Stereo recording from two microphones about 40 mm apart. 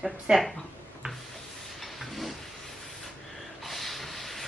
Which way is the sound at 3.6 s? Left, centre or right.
Centre.